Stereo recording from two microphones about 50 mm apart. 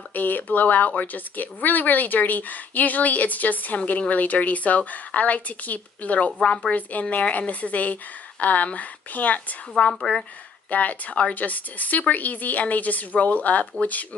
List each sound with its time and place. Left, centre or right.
0.1 s a woman's voice: left
9.8 s a woman's voice: centre
10.7 s a woman's voice: left